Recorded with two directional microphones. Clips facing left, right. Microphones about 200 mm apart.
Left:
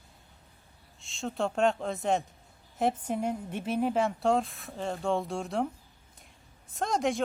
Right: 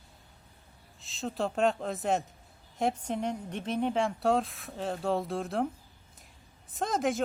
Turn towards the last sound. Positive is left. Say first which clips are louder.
# left 1 dB
turn(degrees=0)  # may be behind; listen again after turning